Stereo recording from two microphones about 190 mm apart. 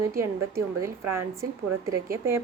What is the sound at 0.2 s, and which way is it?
A woman's voice, 15° right (ahead or behind).